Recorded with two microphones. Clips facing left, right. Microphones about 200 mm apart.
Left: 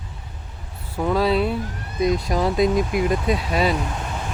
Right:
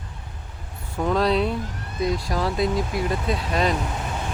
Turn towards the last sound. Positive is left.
turn(degrees=10)  # may be behind; listen again after turning